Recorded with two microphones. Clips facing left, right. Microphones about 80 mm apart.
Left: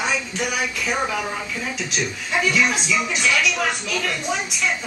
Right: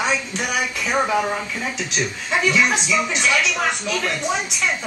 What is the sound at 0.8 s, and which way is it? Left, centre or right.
Speech, right.